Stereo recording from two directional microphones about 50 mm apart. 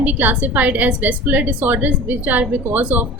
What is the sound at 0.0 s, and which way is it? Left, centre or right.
A woman's voice, right.